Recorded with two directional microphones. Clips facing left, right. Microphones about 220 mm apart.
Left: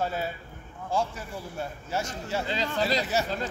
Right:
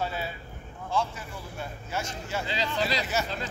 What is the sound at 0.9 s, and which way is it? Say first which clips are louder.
Speech: left 1 dB; 40° left (ahead or behind).